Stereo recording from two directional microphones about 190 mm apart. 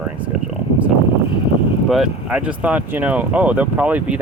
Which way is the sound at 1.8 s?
Centre (ahead or behind).